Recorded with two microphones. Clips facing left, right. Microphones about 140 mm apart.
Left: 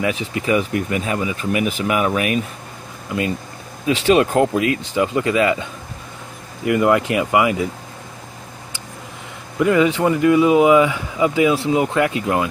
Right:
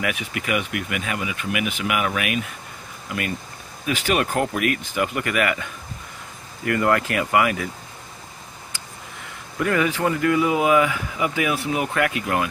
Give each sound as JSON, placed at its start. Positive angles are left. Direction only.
{"t": 0.0, "sound": "speech", "side_deg": 25}
{"t": 3.1, "sound": "speech", "side_deg": 25}
{"t": 9.6, "sound": "speech", "side_deg": 20}